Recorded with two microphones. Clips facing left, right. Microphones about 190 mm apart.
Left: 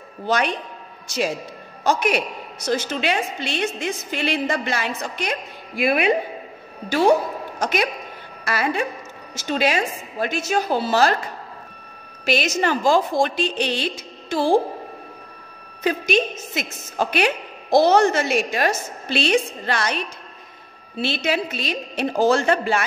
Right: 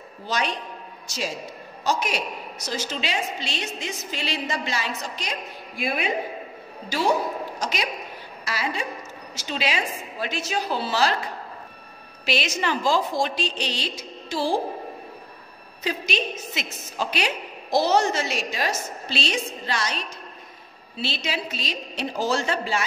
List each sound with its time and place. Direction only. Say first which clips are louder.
0.3 s a woman's voice: left 5 dB; 55° left (ahead or behind)
7.5 s a woman's voice: left 6 dB; 55° left (ahead or behind)
12.3 s a woman's voice: left 5 dB; 45° left (ahead or behind)
15.8 s a woman's voice: left 7 dB; 55° left (ahead or behind)